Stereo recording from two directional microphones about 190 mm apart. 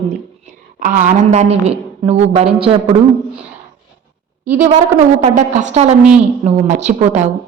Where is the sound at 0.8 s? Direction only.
45° right (ahead or behind).